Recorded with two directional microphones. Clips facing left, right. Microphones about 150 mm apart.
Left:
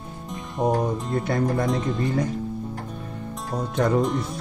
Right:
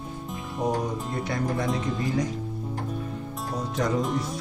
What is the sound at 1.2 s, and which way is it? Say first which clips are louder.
Speech: left 4 dB; 50° left (ahead or behind).